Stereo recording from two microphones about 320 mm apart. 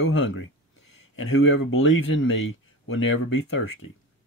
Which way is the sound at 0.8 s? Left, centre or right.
Left.